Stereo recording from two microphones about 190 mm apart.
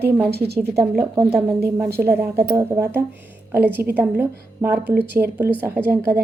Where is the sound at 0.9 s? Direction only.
15° right (ahead or behind).